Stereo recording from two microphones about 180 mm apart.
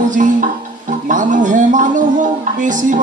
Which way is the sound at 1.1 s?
45° right (ahead or behind).